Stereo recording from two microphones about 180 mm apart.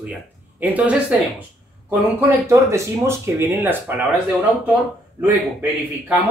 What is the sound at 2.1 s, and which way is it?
Speech, 15° right (ahead or behind).